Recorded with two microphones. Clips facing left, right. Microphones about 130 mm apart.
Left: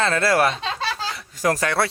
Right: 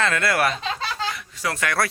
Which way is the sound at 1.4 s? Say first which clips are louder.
Left 6 dB; 40° left (ahead or behind).